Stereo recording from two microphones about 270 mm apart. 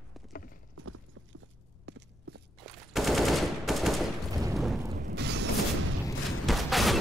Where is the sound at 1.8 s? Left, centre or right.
Right.